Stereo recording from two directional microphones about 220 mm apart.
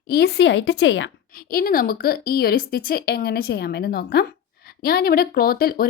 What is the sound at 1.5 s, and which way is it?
Speech, 40° left (ahead or behind).